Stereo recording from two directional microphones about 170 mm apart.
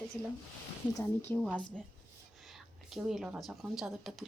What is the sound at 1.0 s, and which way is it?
Speech, 15° left (ahead or behind).